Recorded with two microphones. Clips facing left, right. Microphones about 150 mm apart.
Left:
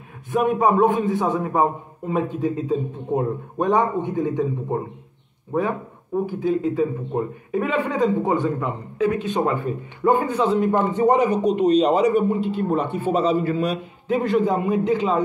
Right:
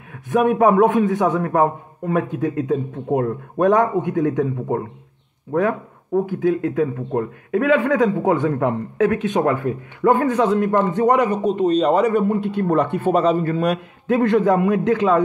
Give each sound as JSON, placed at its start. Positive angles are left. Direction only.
{"t": 0.3, "sound": "speech", "side_deg": -90}
{"t": 11.4, "sound": "speech", "side_deg": -35}
{"t": 11.8, "sound": "a man's voice", "side_deg": -55}